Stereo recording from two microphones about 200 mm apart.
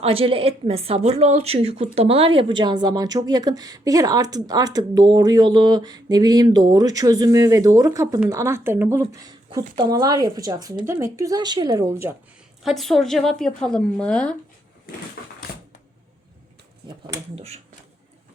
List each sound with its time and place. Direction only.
0.0 s speech: 30° right (ahead or behind); by 12.1 s 15° right (ahead or behind)
12.6 s speech: centre (ahead or behind)
15.2 s a sound: 55° left (ahead or behind)
17.3 s speech: 30° right (ahead or behind)